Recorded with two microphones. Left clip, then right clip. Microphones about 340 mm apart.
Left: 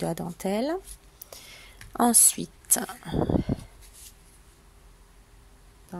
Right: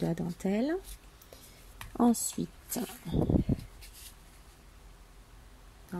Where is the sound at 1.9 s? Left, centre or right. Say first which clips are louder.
Left 5 dB; left.